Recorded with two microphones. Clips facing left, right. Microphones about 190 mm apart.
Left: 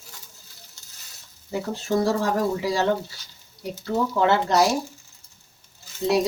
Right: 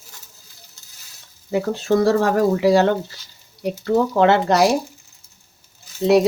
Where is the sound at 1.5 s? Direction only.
70° right (ahead or behind).